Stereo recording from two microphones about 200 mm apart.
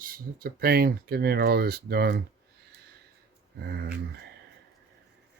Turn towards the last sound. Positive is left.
turn(degrees=-50)  # may be behind; listen again after turning